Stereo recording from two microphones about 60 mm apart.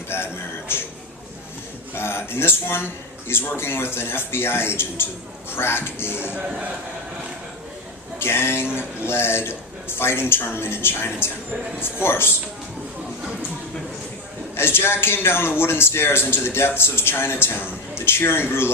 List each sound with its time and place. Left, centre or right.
0.1 s music: left
2.0 s a man's voice: left
8.2 s a man's voice: left
14.5 s a man's voice: left